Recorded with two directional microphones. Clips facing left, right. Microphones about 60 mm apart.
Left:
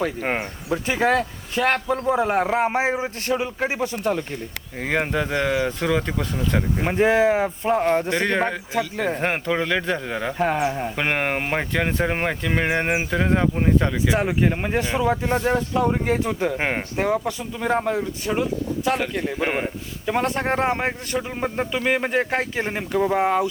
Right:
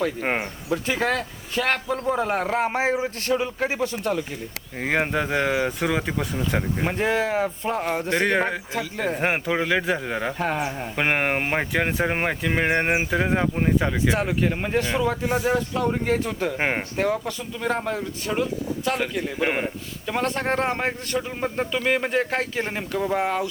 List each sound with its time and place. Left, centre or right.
0.2 s a man's voice: centre
0.7 s speech: centre
4.8 s speech: centre
6.8 s speech: centre
7.8 s a man's voice: centre
10.3 s a man's voice: centre
10.9 s speech: centre
14.1 s speech: centre
15.3 s speech: centre
16.6 s speech: centre
17.0 s a man's voice: centre
20.1 s speech: centre